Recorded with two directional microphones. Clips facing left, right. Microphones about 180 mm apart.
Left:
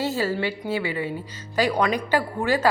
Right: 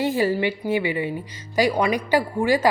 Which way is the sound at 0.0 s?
15° right (ahead or behind).